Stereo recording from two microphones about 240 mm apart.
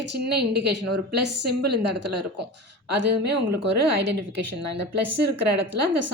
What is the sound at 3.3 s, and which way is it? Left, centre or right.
Speech, right.